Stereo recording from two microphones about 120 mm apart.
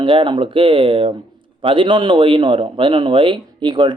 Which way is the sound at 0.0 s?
45° right (ahead or behind).